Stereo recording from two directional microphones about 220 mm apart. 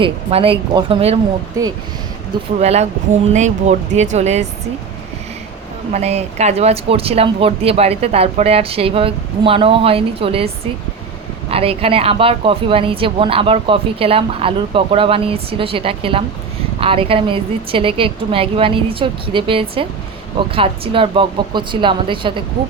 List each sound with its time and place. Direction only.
0.0 s a woman's voice: 25° right (ahead or behind)
1.6 s speech: 15° right (ahead or behind)
2.6 s a woman's voice: 30° right (ahead or behind)
5.9 s a woman's voice: 30° right (ahead or behind)
11.5 s a woman's voice: 25° right (ahead or behind)